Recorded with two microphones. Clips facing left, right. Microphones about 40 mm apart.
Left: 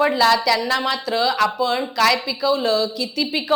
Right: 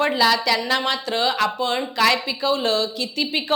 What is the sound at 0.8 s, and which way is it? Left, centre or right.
Speech, right.